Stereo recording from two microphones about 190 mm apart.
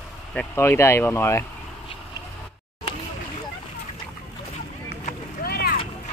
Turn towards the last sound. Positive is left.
turn(degrees=55)  # may be behind; listen again after turning